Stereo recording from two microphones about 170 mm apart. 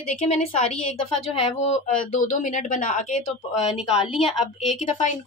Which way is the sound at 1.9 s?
50° left (ahead or behind).